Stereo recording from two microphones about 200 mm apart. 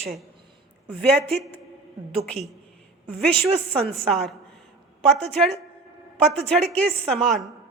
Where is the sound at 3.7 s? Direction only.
5° left (ahead or behind).